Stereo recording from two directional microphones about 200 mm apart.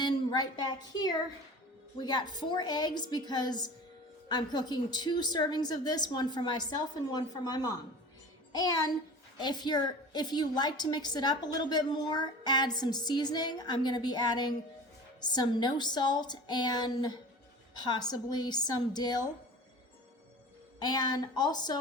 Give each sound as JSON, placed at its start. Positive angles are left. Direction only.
{"t": 0.0, "sound": "a woman's voice", "side_deg": 20}
{"t": 20.8, "sound": "a woman's voice", "side_deg": 20}